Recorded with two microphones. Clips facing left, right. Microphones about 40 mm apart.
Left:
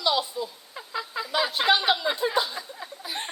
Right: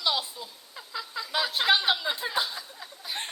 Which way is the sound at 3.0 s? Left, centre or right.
Centre.